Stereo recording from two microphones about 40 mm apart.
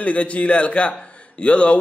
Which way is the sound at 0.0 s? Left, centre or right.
Left.